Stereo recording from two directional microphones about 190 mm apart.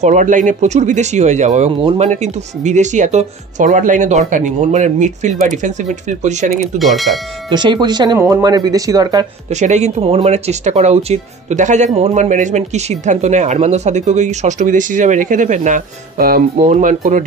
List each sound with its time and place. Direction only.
0.0 s speech: 40° right (ahead or behind)
6.8 s speech: centre (ahead or behind)
7.5 s speech: 25° right (ahead or behind)
9.5 s speech: 35° right (ahead or behind)